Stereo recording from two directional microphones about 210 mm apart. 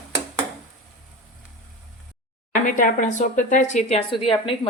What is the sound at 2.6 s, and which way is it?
A woman's voice, 40° left (ahead or behind).